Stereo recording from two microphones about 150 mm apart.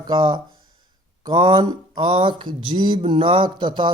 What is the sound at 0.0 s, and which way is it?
Speech, 30° right (ahead or behind).